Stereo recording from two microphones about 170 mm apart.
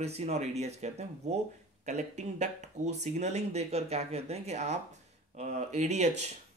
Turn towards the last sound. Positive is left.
turn(degrees=-40)  # may be behind; listen again after turning